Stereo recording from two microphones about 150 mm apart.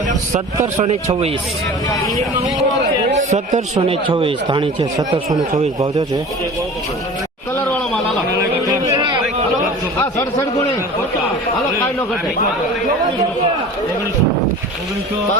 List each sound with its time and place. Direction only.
0.3 s speech: 45° right (ahead or behind)
3.1 s speech: 50° right (ahead or behind); by 5.4 s 25° right (ahead or behind)
7.5 s a sound: 15° left (ahead or behind)
10.0 s speech: 20° left (ahead or behind)